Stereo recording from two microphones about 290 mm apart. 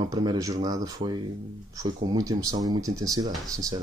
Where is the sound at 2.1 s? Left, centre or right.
Centre.